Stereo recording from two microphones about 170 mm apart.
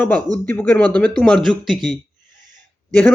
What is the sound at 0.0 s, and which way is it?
Speech, 10° left (ahead or behind).